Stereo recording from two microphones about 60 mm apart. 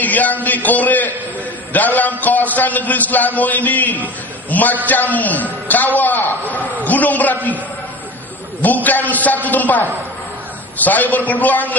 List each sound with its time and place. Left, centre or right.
0.0 s a sound: left
1.7 s a man's voice: left
8.6 s a man's voice: left